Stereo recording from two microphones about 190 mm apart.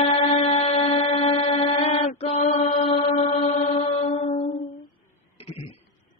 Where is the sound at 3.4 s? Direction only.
35° left (ahead or behind).